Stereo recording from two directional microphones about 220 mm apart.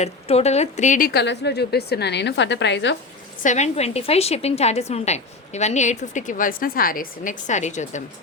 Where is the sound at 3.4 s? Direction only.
30° left (ahead or behind).